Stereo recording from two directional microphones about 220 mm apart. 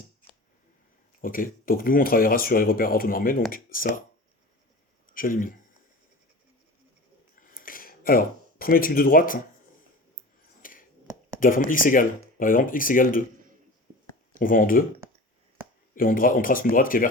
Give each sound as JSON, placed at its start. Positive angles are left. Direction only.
{"t": 1.2, "sound": "speech", "side_deg": 40}
{"t": 5.0, "sound": "speech", "side_deg": 40}
{"t": 7.3, "sound": "a sound", "side_deg": 40}
{"t": 10.6, "sound": "a sound", "side_deg": 40}
{"t": 11.3, "sound": "speech", "side_deg": 40}
{"t": 14.3, "sound": "speech", "side_deg": 40}
{"t": 16.0, "sound": "speech", "side_deg": 40}